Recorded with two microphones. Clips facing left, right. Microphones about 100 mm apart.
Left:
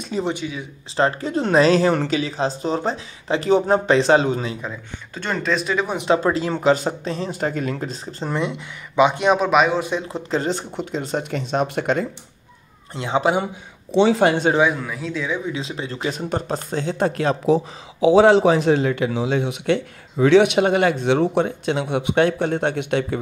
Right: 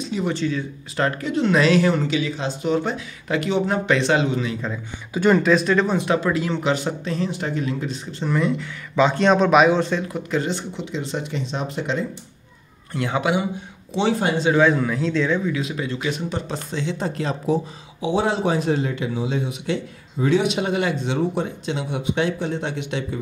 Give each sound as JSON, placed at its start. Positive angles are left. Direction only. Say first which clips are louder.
{"t": 0.3, "sound": "speech", "louder": "right 3 dB", "side_deg": 15}
{"t": 0.9, "sound": "speech", "louder": "left 2 dB", "side_deg": 30}
{"t": 5.1, "sound": "speech", "louder": "right 7 dB", "side_deg": -5}
{"t": 5.9, "sound": "speech", "louder": "left 2 dB", "side_deg": 30}
{"t": 7.3, "sound": "speech", "louder": "left 2 dB", "side_deg": 45}
{"t": 8.4, "sound": "speech", "louder": "right 5 dB", "side_deg": 20}
{"t": 9.5, "sound": "speech", "louder": "right 2 dB", "side_deg": 0}
{"t": 10.0, "sound": "speech", "louder": "left 1 dB", "side_deg": 30}
{"t": 12.9, "sound": "speech", "louder": "left 2 dB", "side_deg": 25}
{"t": 14.1, "sound": "a man's voice", "louder": "left 5 dB", "side_deg": 75}
{"t": 14.8, "sound": "speech", "louder": "right 6 dB", "side_deg": 5}
{"t": 15.4, "sound": "speech", "louder": "right 2 dB", "side_deg": 25}
{"t": 17.0, "sound": "a man's voice", "louder": "left 5 dB", "side_deg": 65}
{"t": 18.1, "sound": "a man's voice", "louder": "left 7 dB", "side_deg": 90}